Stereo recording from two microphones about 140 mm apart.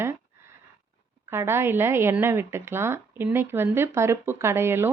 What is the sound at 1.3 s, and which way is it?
Speech, 15° right (ahead or behind).